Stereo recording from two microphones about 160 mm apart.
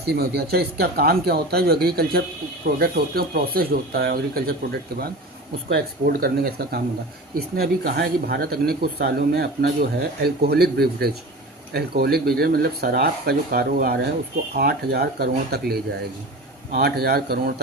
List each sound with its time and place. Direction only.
0.0 s speech: 85° right
5.6 s speech: 80° right